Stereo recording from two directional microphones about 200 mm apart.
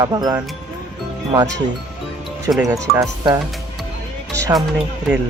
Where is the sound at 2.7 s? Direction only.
15° right (ahead or behind).